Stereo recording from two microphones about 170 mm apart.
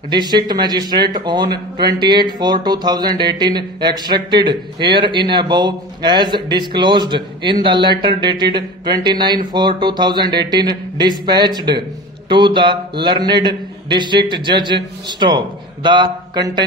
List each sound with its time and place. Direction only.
0.1 s speech: 25° right (ahead or behind)